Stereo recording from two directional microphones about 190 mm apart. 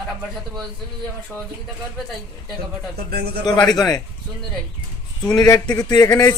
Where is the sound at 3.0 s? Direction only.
55° right (ahead or behind).